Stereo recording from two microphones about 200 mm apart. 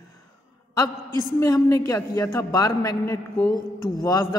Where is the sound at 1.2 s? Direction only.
15° left (ahead or behind).